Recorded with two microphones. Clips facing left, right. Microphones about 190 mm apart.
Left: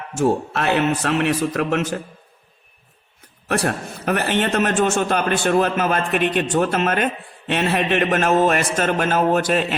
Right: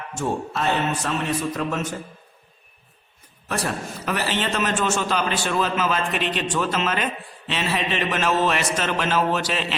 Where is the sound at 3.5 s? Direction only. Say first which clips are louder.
Left 5 dB; 65° left (ahead or behind).